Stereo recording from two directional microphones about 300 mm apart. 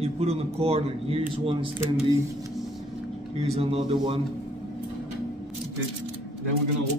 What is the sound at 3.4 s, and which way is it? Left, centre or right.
Speech, centre.